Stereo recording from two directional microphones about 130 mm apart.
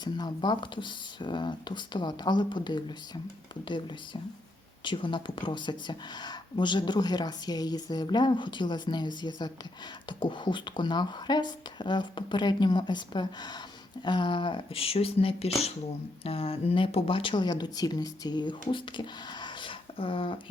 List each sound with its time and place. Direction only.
0.0 s speech: 30° left (ahead or behind)